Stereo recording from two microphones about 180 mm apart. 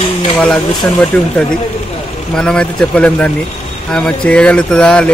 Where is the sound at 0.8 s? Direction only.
5° left (ahead or behind).